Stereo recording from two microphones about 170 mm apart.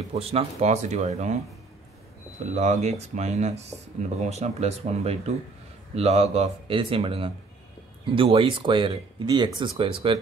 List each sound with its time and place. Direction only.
0.1 s speech: 35° right (ahead or behind)
2.5 s speech: 45° right (ahead or behind)